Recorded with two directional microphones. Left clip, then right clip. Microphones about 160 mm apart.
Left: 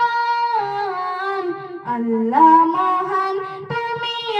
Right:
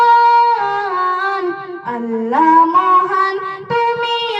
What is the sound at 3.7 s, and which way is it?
Child singing, 30° right (ahead or behind).